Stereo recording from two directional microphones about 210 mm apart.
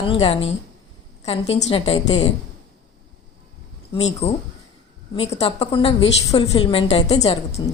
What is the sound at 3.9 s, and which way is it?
A woman's voice, 30° left (ahead or behind).